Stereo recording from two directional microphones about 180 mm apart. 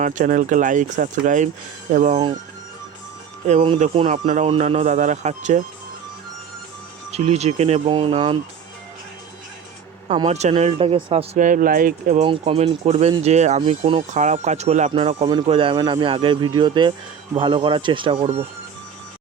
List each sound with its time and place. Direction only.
0.0 s speech: 45° right (ahead or behind)
3.4 s speech: 35° right (ahead or behind)
7.1 s speech: 35° right (ahead or behind)
10.2 s speech: 40° right (ahead or behind)
11.3 s speech: 50° right (ahead or behind)
12.2 s speech: 30° right (ahead or behind)